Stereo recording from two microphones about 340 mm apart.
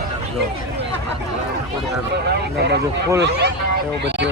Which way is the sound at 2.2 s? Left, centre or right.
Right.